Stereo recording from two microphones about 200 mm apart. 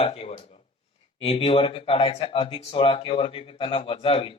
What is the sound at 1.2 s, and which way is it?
Speech, 30° left (ahead or behind).